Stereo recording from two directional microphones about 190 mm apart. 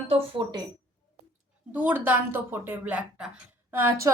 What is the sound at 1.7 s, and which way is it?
A woman's voice, 10° right (ahead or behind).